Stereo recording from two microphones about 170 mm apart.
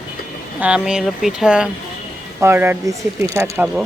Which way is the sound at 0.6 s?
5° right (ahead or behind).